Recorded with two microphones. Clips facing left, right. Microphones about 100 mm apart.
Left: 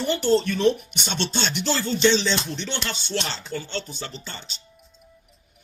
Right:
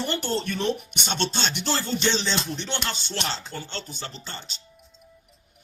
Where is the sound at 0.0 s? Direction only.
50° right (ahead or behind).